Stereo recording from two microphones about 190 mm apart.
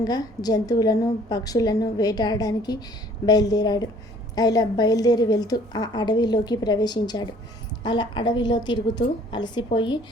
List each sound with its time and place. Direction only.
0.1 s a woman's voice: 20° left (ahead or behind)